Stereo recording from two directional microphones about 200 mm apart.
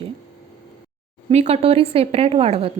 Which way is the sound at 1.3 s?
30° right (ahead or behind).